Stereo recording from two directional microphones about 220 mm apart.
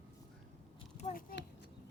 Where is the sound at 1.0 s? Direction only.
30° left (ahead or behind).